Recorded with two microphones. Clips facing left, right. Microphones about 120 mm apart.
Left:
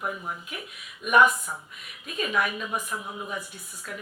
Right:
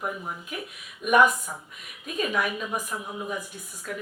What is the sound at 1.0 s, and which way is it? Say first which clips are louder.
Speech: even; 45° right (ahead or behind).